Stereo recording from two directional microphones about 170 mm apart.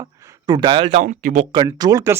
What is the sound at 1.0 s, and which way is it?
Speech, 50° right (ahead or behind).